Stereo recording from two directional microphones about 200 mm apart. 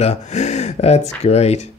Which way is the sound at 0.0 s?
35° left (ahead or behind).